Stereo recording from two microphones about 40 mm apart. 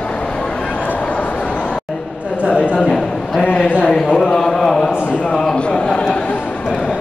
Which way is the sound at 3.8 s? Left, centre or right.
Centre.